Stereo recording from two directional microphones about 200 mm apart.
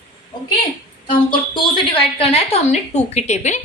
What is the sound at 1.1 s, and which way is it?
A woman's voice, 25° left (ahead or behind).